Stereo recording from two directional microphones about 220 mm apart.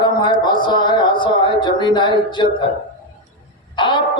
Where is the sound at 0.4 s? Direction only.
20° left (ahead or behind).